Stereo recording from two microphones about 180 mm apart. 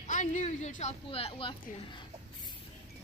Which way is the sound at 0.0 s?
45° left (ahead or behind).